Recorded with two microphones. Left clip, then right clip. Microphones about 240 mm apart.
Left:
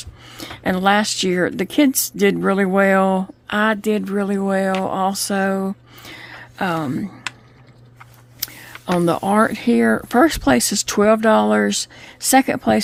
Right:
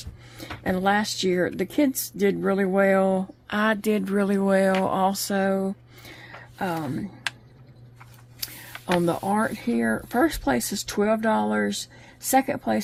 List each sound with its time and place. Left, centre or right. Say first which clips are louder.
0.0 s speech: left 7 dB; left
8.4 s a sound: left 5 dB; left
8.9 s speech: left 6 dB; left